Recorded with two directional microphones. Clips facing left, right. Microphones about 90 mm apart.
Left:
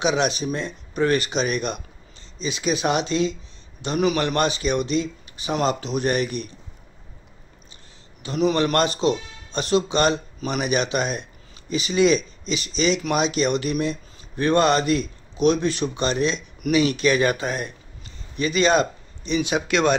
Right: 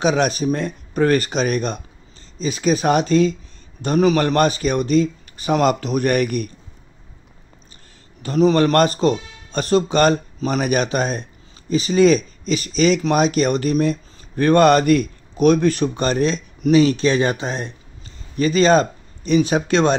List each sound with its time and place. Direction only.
0.0 s speech: 45° right (ahead or behind)
8.2 s speech: 40° right (ahead or behind)
18.3 s speech: 40° right (ahead or behind)